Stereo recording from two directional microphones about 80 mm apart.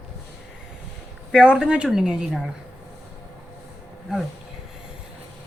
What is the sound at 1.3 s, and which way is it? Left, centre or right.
Speech, centre.